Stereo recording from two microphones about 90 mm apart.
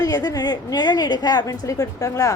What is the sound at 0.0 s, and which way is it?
A woman's voice, 45° left (ahead or behind).